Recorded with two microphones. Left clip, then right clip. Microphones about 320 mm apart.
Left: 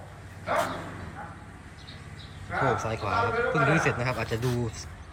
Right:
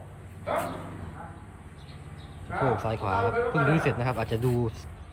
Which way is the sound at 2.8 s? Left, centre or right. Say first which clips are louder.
Even; centre.